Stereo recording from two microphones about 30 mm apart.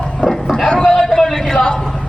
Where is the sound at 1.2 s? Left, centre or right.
Centre.